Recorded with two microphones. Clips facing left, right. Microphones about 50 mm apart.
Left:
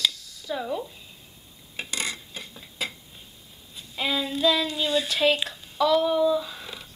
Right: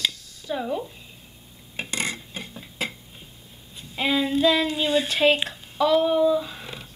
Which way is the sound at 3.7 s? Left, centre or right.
Centre.